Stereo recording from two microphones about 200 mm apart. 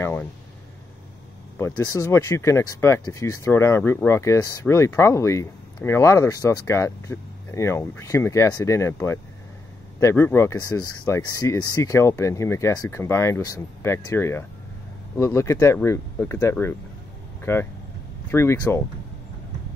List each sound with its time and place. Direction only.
0.0 s speech: 10° left (ahead or behind)
1.9 s speech: 15° left (ahead or behind)
17.4 s vehicle: 10° left (ahead or behind)
18.3 s speech: 15° left (ahead or behind)